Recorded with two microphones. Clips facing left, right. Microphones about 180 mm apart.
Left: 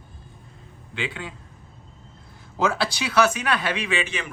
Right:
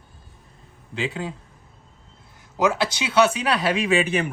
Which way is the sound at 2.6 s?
20° right (ahead or behind).